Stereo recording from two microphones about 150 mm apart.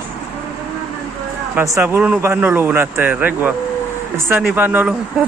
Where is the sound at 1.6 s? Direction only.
20° right (ahead or behind).